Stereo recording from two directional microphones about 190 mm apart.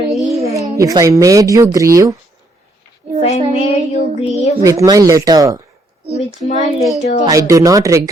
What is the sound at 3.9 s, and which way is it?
Child singing, 35° left (ahead or behind).